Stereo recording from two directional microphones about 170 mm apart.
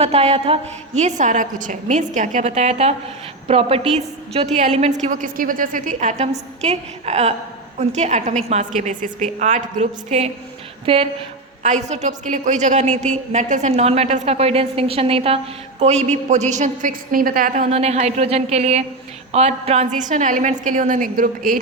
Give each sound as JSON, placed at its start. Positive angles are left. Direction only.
{"t": 0.0, "sound": "a woman's voice", "side_deg": -35}
{"t": 11.6, "sound": "a woman's voice", "side_deg": -45}
{"t": 17.7, "sound": "a woman's voice", "side_deg": -40}